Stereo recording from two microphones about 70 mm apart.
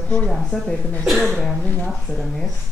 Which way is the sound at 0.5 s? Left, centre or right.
Left.